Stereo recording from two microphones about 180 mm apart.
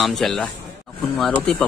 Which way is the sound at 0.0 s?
Centre (ahead or behind).